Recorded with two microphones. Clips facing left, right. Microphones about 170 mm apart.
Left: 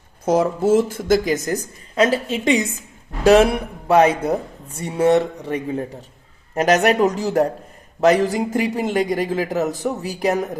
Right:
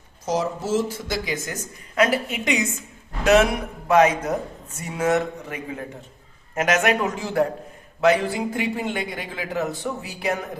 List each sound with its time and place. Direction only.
0.3 s speech: 55° left (ahead or behind)
2.0 s a woman's voice: 25° left (ahead or behind)